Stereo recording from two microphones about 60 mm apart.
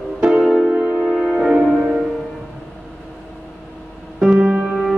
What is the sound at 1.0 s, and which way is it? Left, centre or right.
Music, centre.